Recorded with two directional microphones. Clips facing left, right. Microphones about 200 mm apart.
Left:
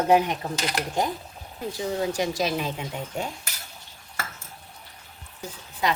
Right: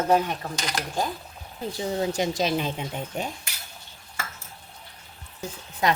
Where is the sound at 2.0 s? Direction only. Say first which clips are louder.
Right 1 dB; 20° right (ahead or behind).